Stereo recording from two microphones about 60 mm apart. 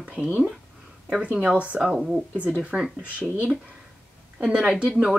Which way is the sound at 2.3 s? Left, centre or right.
Right.